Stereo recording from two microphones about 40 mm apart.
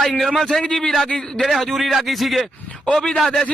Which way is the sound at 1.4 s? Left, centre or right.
Centre.